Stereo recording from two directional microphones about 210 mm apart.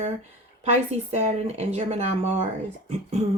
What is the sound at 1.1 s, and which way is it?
Speech, 30° right (ahead or behind).